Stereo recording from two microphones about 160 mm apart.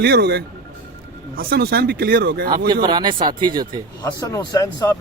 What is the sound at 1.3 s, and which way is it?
Speech, 75° right (ahead or behind).